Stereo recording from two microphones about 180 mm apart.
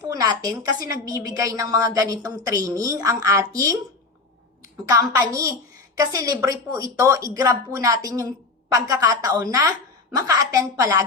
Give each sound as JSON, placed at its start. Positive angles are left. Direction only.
{"t": 0.2, "sound": "a woman's voice", "side_deg": -20}
{"t": 4.9, "sound": "a woman's voice", "side_deg": -20}